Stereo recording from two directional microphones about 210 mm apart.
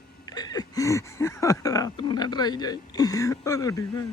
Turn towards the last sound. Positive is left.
turn(degrees=15)  # may be behind; listen again after turning